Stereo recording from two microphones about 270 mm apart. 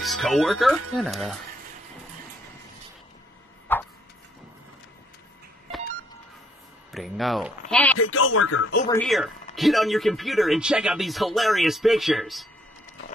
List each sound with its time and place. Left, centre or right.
0.0 s speech: centre
3.7 s a sound: centre
6.9 s speech: centre
8.0 s speech: left
8.8 s speech: centre